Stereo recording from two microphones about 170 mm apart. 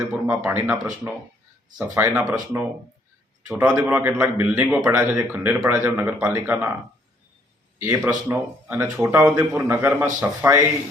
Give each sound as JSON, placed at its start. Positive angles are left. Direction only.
{"t": 0.0, "sound": "speech", "side_deg": -10}
{"t": 2.2, "sound": "speech", "side_deg": -20}
{"t": 3.4, "sound": "speech", "side_deg": -5}
{"t": 7.8, "sound": "a man's voice", "side_deg": -15}